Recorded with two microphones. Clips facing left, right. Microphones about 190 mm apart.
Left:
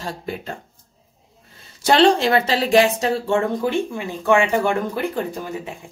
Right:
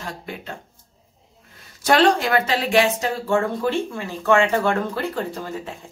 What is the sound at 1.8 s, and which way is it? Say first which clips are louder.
Speech: left 2 dB; 25° left (ahead or behind).